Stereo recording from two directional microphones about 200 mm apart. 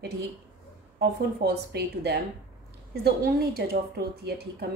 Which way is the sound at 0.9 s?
55° right (ahead or behind).